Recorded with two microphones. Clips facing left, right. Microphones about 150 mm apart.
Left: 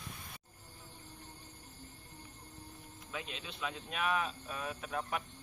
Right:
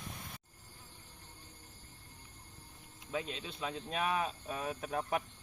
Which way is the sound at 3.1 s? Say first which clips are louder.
Right 5 dB; 35° right (ahead or behind).